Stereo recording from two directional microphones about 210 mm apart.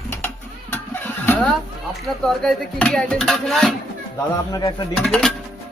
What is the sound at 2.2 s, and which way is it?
Speech, centre (ahead or behind).